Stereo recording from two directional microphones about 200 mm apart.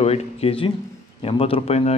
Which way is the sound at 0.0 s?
30° left (ahead or behind).